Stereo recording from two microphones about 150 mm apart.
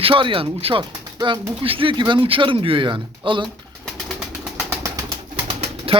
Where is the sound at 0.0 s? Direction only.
35° right (ahead or behind).